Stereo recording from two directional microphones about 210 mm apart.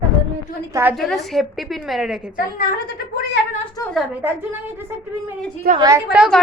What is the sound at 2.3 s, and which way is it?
Speech, 45° left (ahead or behind).